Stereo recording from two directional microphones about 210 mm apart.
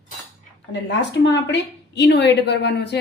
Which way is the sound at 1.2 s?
55° left (ahead or behind).